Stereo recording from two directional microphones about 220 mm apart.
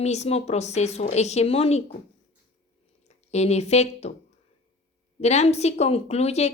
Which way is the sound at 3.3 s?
30° left (ahead or behind).